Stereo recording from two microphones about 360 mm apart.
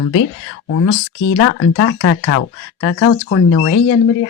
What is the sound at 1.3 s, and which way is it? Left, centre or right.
Speech, left.